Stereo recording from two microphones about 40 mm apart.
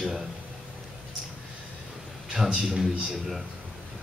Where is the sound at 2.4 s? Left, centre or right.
Right.